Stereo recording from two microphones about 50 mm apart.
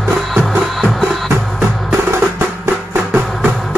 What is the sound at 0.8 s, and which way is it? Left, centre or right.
Music, centre.